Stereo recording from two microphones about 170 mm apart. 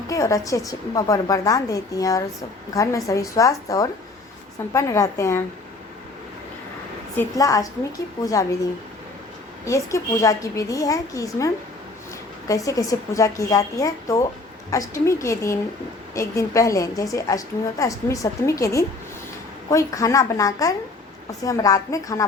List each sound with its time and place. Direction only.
0.1 s a woman's voice: 20° left (ahead or behind)
7.2 s a woman's voice: 20° left (ahead or behind)
9.6 s a woman's voice: 20° left (ahead or behind)